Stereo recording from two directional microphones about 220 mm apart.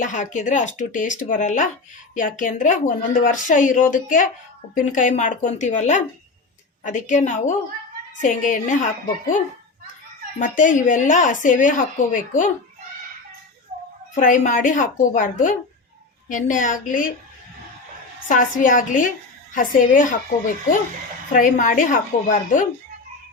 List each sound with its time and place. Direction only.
0.0 s a woman's voice: 35° left (ahead or behind)
10.3 s a woman's voice: 35° left (ahead or behind)
14.2 s a woman's voice: 35° left (ahead or behind)
18.3 s a woman's voice: 35° left (ahead or behind)